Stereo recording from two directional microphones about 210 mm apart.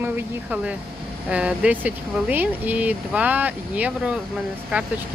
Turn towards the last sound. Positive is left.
turn(degrees=-5)  # may be behind; listen again after turning